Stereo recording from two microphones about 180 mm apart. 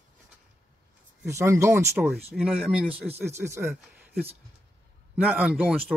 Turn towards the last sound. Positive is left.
turn(degrees=-5)  # may be behind; listen again after turning